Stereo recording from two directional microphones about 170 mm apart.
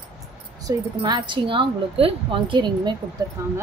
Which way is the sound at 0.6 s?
20° right (ahead or behind).